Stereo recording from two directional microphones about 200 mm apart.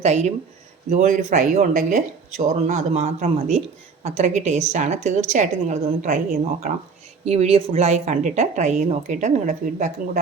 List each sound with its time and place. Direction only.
0.0 s speech: 35° right (ahead or behind)